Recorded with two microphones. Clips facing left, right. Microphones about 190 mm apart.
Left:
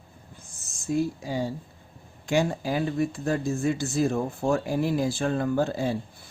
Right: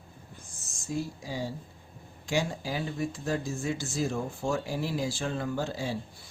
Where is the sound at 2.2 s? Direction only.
55° left (ahead or behind).